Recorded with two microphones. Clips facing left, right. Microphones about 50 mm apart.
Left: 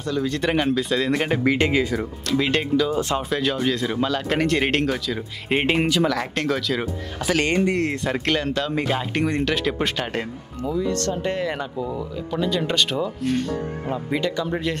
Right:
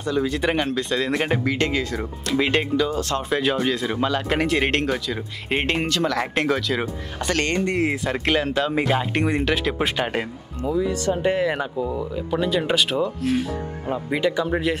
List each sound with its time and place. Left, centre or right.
0.0 s speech: centre
1.4 s speech: centre
2.0 s speech: centre
2.9 s speech: centre
3.3 s speech: centre
6.3 s speech: centre
7.3 s speech: centre
7.7 s speech: centre